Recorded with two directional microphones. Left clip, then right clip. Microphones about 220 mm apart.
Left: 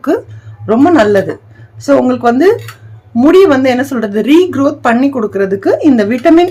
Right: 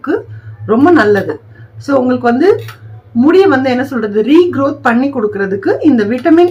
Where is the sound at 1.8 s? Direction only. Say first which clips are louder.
Left 2 dB; 50° left (ahead or behind).